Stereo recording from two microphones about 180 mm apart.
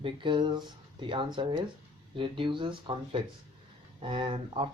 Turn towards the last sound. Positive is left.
turn(degrees=-30)  # may be behind; listen again after turning